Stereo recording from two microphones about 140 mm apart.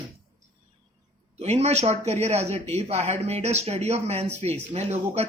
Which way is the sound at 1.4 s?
50° right (ahead or behind).